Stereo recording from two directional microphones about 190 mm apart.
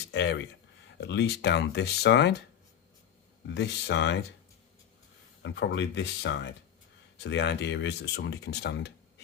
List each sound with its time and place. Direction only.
0.1 s speech: 70° left (ahead or behind)
3.4 s speech: 65° left (ahead or behind)
5.4 s speech: 70° left (ahead or behind)